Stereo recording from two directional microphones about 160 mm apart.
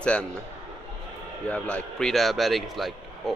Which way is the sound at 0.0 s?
5° left (ahead or behind).